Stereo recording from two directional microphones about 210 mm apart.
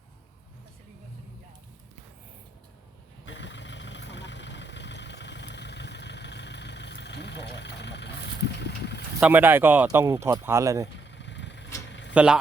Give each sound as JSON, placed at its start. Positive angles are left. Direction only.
{"t": 3.2, "sound": "vehicle", "side_deg": 60}
{"t": 9.2, "sound": "speech", "side_deg": -10}
{"t": 11.0, "sound": "vehicle", "side_deg": 60}
{"t": 11.9, "sound": "a sound", "side_deg": 60}
{"t": 12.1, "sound": "speech", "side_deg": -5}